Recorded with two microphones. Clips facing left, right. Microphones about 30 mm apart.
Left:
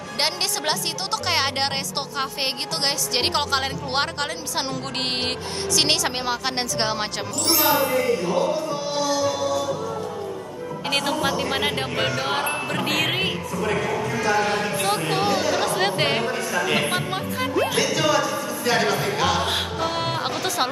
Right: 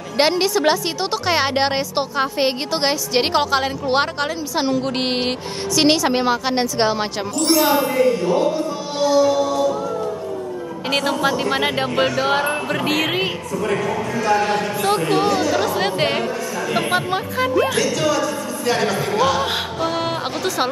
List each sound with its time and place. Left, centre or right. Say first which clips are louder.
0.2 s speech: right 8 dB; centre
9.1 s music: right 9 dB; centre
10.9 s speech: right 4 dB; centre
16.9 s speech: right 5 dB; right
17.6 s speech: right 2 dB; centre